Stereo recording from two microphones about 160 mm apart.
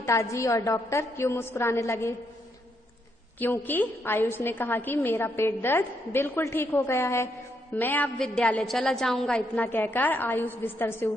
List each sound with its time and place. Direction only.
0.0 s a woman's voice: 20° left (ahead or behind)
3.3 s a woman's voice: 10° left (ahead or behind)